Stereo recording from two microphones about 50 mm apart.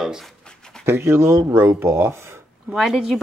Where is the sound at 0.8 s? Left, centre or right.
Right.